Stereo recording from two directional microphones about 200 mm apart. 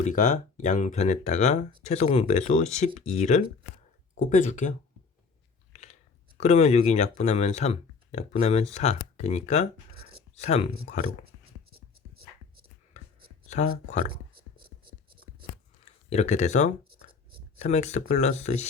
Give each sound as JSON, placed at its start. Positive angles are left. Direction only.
{"t": 0.0, "sound": "speech", "side_deg": 40}
{"t": 5.7, "sound": "speech", "side_deg": 35}
{"t": 12.9, "sound": "a sound", "side_deg": 35}
{"t": 13.5, "sound": "speech", "side_deg": 35}
{"t": 15.8, "sound": "speech", "side_deg": 35}